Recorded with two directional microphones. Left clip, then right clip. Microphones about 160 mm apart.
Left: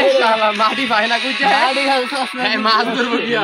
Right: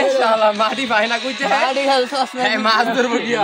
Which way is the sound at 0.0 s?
20° right (ahead or behind).